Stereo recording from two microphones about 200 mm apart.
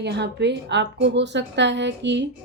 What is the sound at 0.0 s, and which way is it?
Speech, 60° right (ahead or behind).